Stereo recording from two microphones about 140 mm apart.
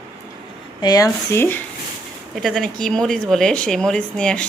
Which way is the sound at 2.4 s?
Centre (ahead or behind).